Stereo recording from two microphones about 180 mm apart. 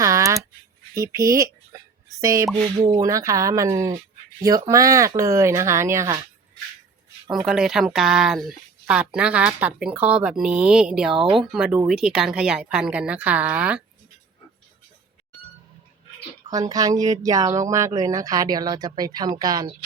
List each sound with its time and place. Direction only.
0.0 s a sound: 15° right (ahead or behind)
0.9 s speech: 15° right (ahead or behind)
7.4 s speech: 5° right (ahead or behind)
16.5 s speech: 20° right (ahead or behind)